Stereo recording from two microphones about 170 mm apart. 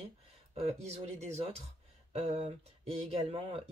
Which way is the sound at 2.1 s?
35° right (ahead or behind).